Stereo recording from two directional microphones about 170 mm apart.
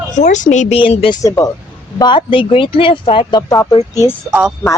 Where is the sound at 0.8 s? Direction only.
30° left (ahead or behind).